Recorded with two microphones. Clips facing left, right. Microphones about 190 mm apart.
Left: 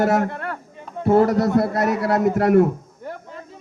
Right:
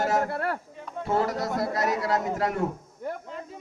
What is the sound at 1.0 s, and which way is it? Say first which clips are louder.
A man's voice: left 10 dB; 60° left (ahead or behind).